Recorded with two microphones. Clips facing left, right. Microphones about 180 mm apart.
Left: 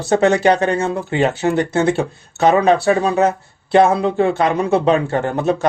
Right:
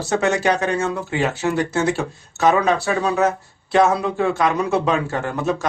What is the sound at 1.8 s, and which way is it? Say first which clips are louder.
Speech: left 4 dB; 55° left (ahead or behind).